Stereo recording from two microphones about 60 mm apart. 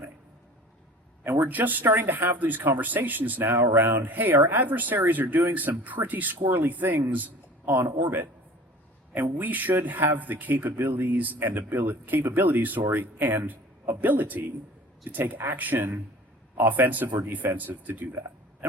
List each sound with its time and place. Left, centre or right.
1.2 s speech: right